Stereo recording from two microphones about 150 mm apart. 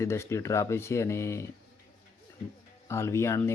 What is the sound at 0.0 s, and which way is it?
Speech, 20° left (ahead or behind).